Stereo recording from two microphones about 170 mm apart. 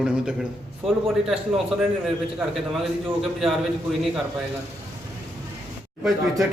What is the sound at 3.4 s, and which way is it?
Speech, centre (ahead or behind).